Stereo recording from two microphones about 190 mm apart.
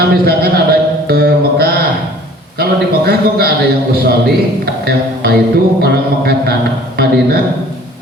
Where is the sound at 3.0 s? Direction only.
55° right (ahead or behind).